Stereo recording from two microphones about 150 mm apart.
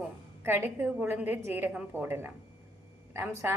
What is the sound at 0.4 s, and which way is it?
A woman's voice, 15° right (ahead or behind).